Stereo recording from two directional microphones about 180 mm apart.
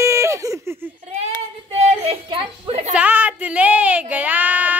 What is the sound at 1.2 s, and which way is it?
Child singing, 35° right (ahead or behind).